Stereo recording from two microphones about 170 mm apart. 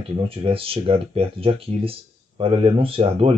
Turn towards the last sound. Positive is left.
turn(degrees=-35)  # may be behind; listen again after turning